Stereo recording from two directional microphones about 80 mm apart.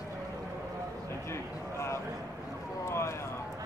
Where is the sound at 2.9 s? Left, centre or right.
Left.